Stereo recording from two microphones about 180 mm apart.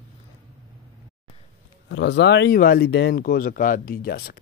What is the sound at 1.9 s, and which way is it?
Speech, 85° left.